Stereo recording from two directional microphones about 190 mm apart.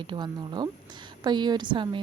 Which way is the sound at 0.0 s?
25° right (ahead or behind).